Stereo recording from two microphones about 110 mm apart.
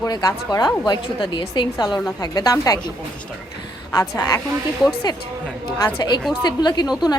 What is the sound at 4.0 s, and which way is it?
Speech, 35° left (ahead or behind).